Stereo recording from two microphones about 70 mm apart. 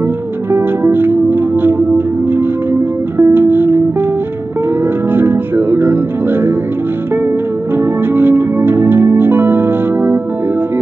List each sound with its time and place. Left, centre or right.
0.5 s music: right
5.1 s music: right
7.7 s music: right